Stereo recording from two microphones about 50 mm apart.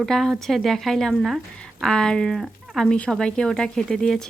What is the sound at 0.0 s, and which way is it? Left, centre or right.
Speech, centre.